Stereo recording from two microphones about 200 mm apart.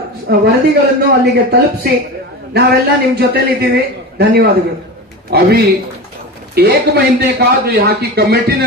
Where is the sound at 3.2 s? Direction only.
55° right (ahead or behind).